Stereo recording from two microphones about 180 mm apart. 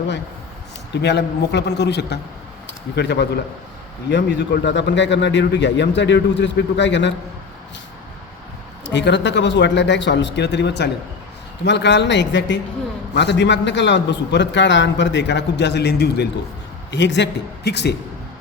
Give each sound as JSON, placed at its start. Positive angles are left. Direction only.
{"t": 1.0, "sound": "a man's voice", "side_deg": 70}
{"t": 8.9, "sound": "a man's voice", "side_deg": 80}
{"t": 16.9, "sound": "a man's voice", "side_deg": 75}